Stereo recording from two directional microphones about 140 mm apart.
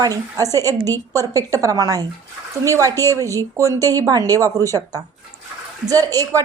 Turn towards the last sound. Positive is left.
turn(degrees=-25)  # may be behind; listen again after turning